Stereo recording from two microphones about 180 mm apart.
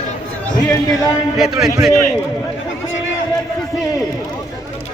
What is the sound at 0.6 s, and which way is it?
Speech, 20° left (ahead or behind).